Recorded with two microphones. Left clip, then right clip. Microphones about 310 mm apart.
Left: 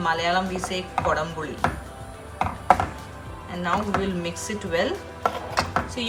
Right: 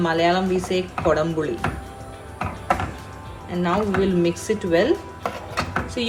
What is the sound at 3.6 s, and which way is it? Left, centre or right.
A woman's voice, centre.